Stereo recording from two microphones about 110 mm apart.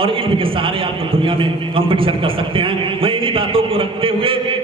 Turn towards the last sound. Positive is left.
turn(degrees=-55)  # may be behind; listen again after turning